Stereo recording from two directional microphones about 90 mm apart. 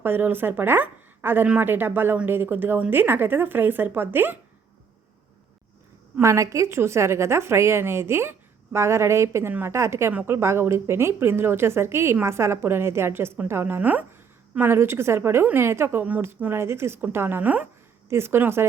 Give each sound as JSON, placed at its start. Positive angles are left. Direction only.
{"t": 0.0, "sound": "a woman's voice", "side_deg": -25}
{"t": 6.1, "sound": "a woman's voice", "side_deg": -30}